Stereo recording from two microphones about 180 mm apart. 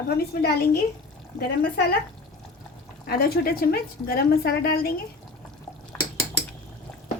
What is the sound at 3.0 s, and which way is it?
A woman's voice, 55° left (ahead or behind).